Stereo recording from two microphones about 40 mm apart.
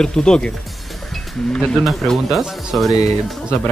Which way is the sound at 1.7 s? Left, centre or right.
Centre.